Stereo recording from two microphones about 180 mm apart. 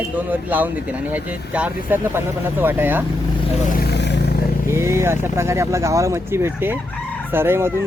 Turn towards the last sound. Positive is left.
turn(degrees=-15)  # may be behind; listen again after turning